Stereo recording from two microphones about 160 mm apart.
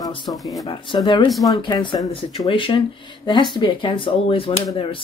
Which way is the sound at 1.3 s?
Centre (ahead or behind).